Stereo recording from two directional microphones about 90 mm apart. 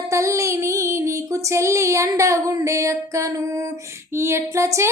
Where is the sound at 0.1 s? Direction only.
35° right (ahead or behind).